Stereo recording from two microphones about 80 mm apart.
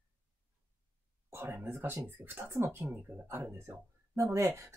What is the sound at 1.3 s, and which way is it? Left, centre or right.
Speech, right.